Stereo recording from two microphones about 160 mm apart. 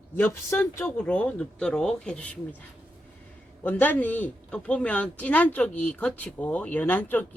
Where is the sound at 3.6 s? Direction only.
10° left (ahead or behind).